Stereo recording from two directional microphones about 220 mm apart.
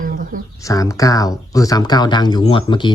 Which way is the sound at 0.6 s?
15° left (ahead or behind).